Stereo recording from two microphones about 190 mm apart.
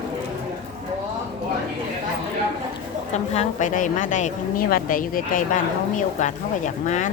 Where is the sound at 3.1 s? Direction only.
35° left (ahead or behind).